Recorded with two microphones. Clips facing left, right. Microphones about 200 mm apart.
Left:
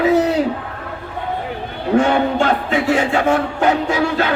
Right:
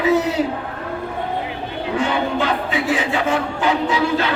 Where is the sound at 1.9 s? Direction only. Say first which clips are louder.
Left 6 dB; 45° left (ahead or behind).